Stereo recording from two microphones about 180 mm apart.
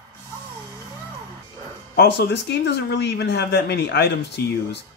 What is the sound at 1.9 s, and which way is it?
Speech, 70° left (ahead or behind).